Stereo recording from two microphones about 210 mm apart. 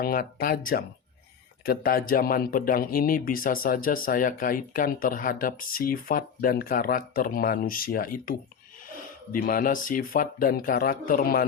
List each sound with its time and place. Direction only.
0.0 s speech: 45° left (ahead or behind)